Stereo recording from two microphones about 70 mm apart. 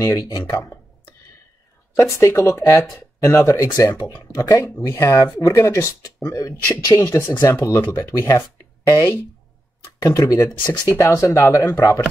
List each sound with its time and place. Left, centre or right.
0.0 s speech: left
2.0 s speech: left
10.0 s speech: left
11.0 s speech: left
11.2 s speech: left